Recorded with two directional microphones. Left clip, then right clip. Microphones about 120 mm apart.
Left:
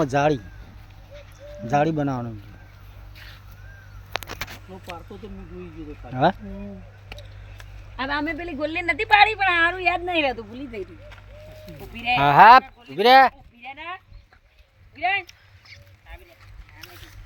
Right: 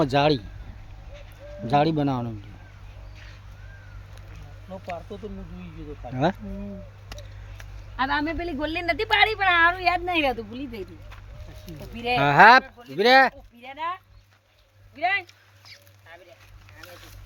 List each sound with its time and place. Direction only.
0.0 s speech: 5° right (ahead or behind)
1.6 s speech: centre (ahead or behind)
7.9 s a woman's voice: 25° right (ahead or behind)
12.2 s speech: 5° right (ahead or behind)
13.6 s a woman's voice: 35° right (ahead or behind)